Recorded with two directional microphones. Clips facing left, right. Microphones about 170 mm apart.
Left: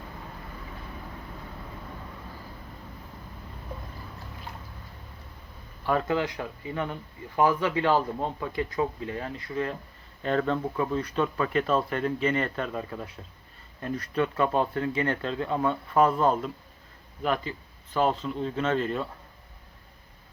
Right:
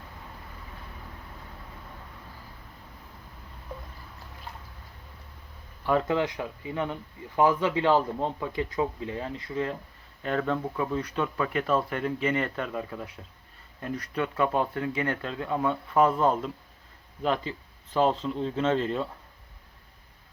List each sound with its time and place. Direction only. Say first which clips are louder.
5.8 s speech: right 1 dB; 20° right (ahead or behind)
10.2 s speech: left 2 dB; 5° right (ahead or behind)
18.0 s speech: right 1 dB; 25° right (ahead or behind)